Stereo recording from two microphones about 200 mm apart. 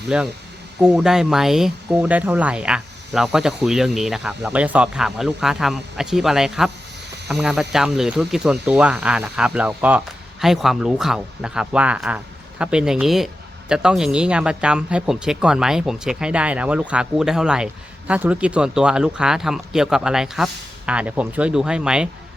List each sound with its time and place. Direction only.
0.1 s speech: 5° right (ahead or behind)